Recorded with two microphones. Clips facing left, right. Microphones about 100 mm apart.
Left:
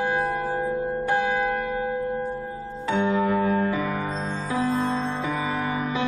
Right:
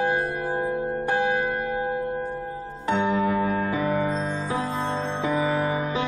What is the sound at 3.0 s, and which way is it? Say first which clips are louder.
Music: left 1 dB; 15° right (ahead or behind).